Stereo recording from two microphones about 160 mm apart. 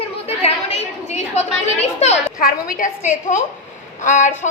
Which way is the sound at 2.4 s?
60° left (ahead or behind).